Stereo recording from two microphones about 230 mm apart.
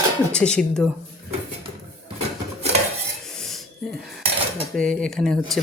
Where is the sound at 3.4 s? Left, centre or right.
Centre.